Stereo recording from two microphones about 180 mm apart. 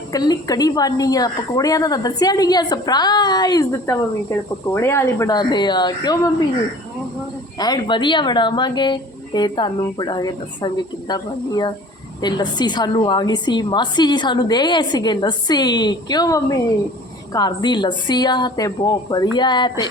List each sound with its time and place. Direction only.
0.1 s a woman's voice: 20° left (ahead or behind)
7.6 s a woman's voice: 25° left (ahead or behind)